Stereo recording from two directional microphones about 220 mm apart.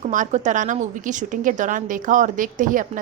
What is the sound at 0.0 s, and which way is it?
A woman's voice, 35° right (ahead or behind).